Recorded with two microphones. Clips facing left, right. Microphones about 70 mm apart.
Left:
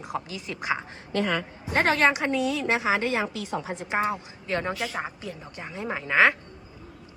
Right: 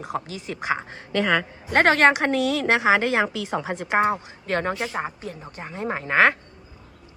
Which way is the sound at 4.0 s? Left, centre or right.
Right.